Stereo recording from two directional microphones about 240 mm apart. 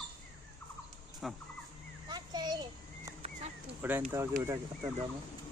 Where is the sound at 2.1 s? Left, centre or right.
Centre.